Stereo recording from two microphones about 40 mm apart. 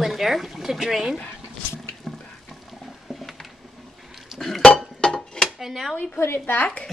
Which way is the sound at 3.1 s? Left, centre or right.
Centre.